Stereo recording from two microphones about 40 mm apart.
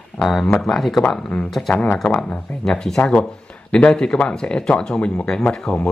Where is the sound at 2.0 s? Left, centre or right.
Left.